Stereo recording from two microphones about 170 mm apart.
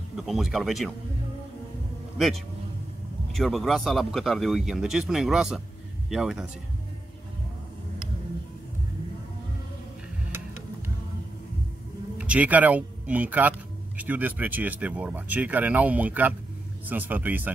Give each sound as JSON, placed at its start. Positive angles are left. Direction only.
{"t": 0.1, "sound": "speech", "side_deg": 0}
{"t": 2.1, "sound": "a man's voice", "side_deg": 0}
{"t": 12.2, "sound": "speech", "side_deg": -10}